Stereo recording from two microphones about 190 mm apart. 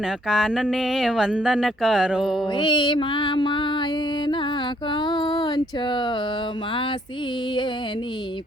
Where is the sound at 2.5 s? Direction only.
25° left (ahead or behind).